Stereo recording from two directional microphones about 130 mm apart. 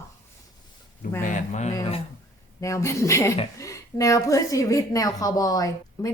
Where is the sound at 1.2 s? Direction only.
70° left (ahead or behind).